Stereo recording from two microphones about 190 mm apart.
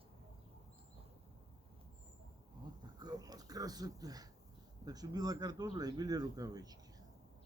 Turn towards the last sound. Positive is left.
turn(degrees=-20)  # may be behind; listen again after turning